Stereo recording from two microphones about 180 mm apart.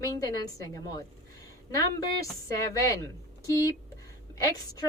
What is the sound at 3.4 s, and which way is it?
Speech, 20° left (ahead or behind).